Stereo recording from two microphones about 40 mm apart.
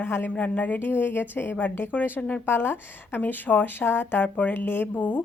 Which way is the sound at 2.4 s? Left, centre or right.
Left.